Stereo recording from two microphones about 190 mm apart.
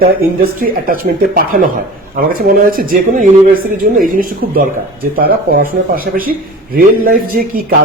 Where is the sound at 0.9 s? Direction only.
50° right (ahead or behind).